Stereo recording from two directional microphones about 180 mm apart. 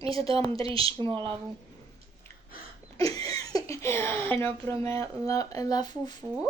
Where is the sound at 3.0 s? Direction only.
20° left (ahead or behind).